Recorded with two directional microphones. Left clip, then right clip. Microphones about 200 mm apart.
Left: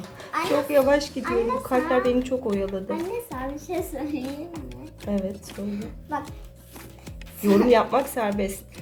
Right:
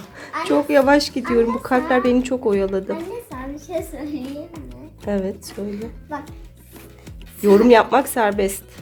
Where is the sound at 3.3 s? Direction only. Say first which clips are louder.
Even; centre (ahead or behind).